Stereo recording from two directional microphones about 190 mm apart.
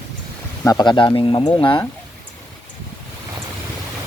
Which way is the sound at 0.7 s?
25° left (ahead or behind).